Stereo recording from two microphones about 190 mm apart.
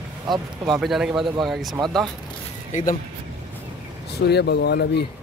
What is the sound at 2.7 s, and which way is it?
Speech, 40° left (ahead or behind).